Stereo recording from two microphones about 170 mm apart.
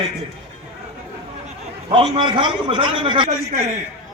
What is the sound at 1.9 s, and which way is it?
A man's voice, 30° right (ahead or behind).